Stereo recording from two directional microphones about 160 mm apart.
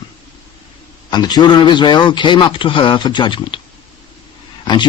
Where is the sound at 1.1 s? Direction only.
25° left (ahead or behind).